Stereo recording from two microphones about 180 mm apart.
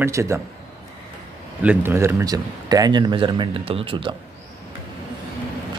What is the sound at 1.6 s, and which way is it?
Speech, 10° right (ahead or behind).